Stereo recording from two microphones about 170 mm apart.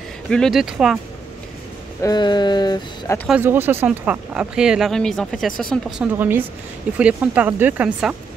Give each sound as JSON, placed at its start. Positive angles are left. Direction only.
{"t": 0.3, "sound": "speech", "side_deg": 0}
{"t": 2.0, "sound": "speech", "side_deg": 25}
{"t": 3.3, "sound": "speech", "side_deg": -10}
{"t": 6.1, "sound": "speech", "side_deg": -10}